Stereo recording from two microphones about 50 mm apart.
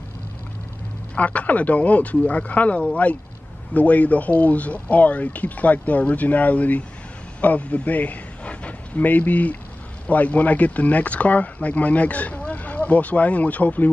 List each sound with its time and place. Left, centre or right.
1.1 s a man's voice: left